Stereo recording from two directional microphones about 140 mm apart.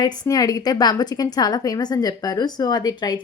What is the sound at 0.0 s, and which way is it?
Speech, 25° left (ahead or behind).